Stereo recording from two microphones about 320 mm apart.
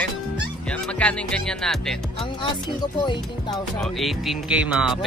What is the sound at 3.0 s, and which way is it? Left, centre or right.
Speech, centre.